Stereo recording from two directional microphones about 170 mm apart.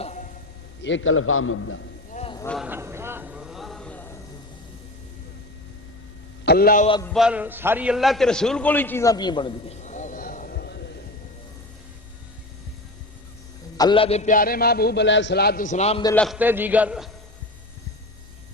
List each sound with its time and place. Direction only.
0.0 s a sound: 45° left (ahead or behind)
0.8 s a man's voice: 90° left
2.1 s vehicle: 45° left (ahead or behind)
2.6 s vehicle: 15° right (ahead or behind); by 4.2 s 10° left (ahead or behind)
6.4 s a man's voice: 65° left (ahead or behind)
7.1 s a man's voice: 5° right (ahead or behind); by 9.7 s 30° left (ahead or behind)
9.8 s a sound: 45° left (ahead or behind); by 10.9 s 80° left
13.7 s a man's voice: 25° left (ahead or behind); by 15.6 s 70° left (ahead or behind)
15.6 s a man's voice: 40° left (ahead or behind)
16.1 s a man's voice: 5° left (ahead or behind)
16.4 s a man's voice: 10° right (ahead or behind)